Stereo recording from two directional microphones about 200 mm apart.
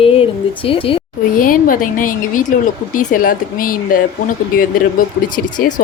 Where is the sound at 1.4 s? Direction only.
45° left (ahead or behind).